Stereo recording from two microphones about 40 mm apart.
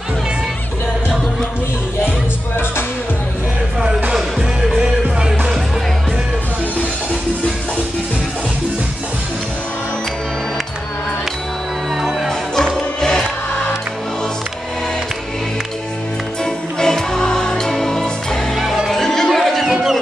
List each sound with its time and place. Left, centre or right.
12.0 s music: centre
12.3 s music: centre
16.4 s music: centre
19.6 s music: centre